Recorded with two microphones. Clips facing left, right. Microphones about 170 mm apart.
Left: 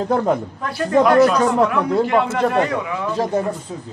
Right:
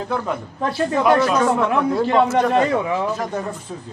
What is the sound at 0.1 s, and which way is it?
Speech, 40° left (ahead or behind).